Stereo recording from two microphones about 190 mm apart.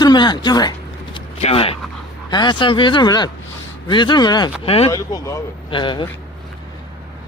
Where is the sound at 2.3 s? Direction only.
25° left (ahead or behind).